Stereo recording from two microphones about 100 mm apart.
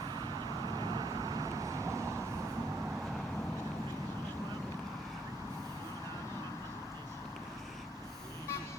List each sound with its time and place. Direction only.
0.6 s vehicle: 45° right (ahead or behind); by 2.0 s 30° right (ahead or behind)